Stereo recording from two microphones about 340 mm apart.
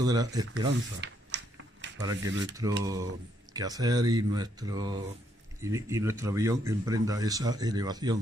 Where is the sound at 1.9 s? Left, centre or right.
Centre.